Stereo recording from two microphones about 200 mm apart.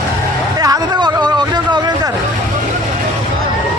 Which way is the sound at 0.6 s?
20° right (ahead or behind).